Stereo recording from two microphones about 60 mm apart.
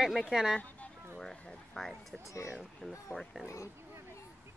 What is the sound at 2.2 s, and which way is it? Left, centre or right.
Speech, left.